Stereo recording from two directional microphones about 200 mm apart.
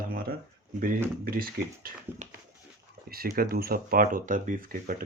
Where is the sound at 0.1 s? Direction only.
50° right (ahead or behind).